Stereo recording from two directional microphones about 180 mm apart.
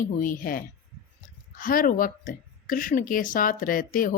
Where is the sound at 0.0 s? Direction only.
50° left (ahead or behind).